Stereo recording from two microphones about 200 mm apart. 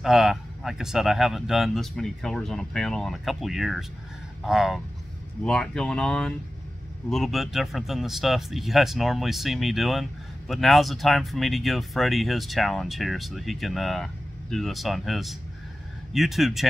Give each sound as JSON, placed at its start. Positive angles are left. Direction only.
{"t": 0.0, "sound": "speech", "side_deg": 0}